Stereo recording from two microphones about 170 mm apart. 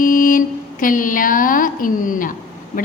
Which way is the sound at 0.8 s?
50° left (ahead or behind).